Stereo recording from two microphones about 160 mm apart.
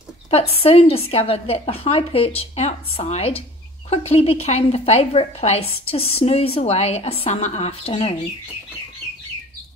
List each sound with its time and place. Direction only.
0.3 s a woman's voice: 40° left (ahead or behind)